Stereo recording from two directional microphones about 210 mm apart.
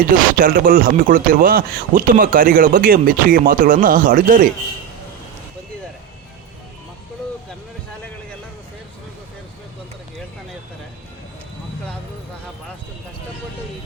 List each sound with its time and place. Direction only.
0.0 s speech: 40° right (ahead or behind)